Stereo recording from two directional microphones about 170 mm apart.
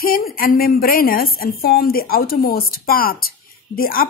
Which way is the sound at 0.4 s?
60° left (ahead or behind).